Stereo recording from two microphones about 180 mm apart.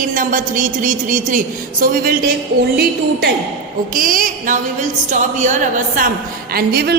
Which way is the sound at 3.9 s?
50° right (ahead or behind).